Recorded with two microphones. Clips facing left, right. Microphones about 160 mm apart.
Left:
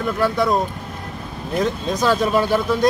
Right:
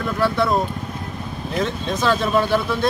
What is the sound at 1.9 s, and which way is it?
Speech, 10° left (ahead or behind).